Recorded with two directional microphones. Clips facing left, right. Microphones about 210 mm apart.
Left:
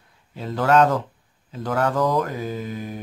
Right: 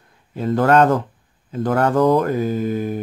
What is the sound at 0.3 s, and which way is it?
Speech, 50° right (ahead or behind).